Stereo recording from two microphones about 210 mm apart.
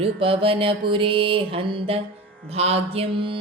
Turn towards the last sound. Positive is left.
turn(degrees=-25)  # may be behind; listen again after turning